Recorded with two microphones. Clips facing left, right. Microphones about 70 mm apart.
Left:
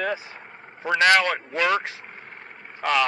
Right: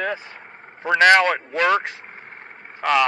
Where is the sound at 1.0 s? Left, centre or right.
Right.